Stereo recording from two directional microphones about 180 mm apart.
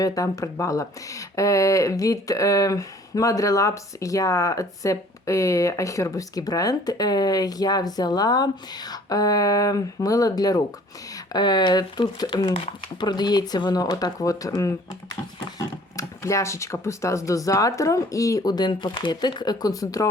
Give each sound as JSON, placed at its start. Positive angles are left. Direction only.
{"t": 0.0, "sound": "speech", "side_deg": 20}